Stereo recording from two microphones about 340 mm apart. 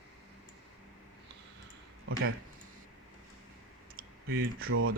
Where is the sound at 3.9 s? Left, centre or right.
Right.